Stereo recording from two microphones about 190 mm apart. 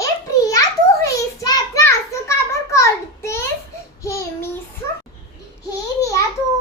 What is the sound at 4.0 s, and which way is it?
Child singing, 15° left (ahead or behind).